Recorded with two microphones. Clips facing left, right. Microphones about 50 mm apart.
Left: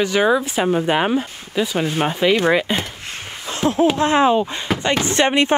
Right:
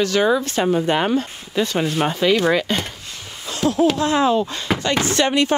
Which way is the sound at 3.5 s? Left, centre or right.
Left.